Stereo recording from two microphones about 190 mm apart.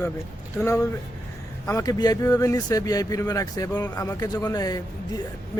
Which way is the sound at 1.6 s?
15° left (ahead or behind).